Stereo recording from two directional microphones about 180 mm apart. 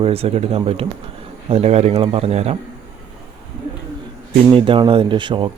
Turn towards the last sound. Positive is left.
turn(degrees=-25)  # may be behind; listen again after turning